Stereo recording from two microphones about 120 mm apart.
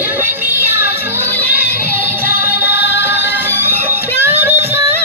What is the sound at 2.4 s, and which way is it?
Music, 15° right (ahead or behind).